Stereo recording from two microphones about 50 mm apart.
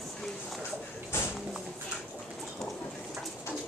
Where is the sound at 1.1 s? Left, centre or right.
Left.